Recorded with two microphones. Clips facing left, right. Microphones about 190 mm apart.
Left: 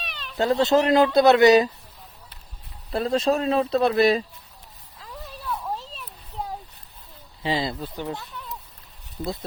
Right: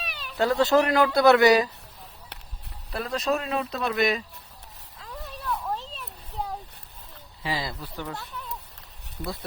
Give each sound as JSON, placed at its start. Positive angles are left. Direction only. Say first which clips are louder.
{"t": 0.0, "sound": "cat", "louder": "even", "side_deg": -10}
{"t": 0.3, "sound": "speech", "louder": "left 1 dB", "side_deg": 25}
{"t": 2.9, "sound": "speech", "louder": "left 5 dB", "side_deg": 30}
{"t": 4.9, "sound": "a sound", "louder": "even", "side_deg": 0}
{"t": 7.4, "sound": "speech", "louder": "left 5 dB", "side_deg": 25}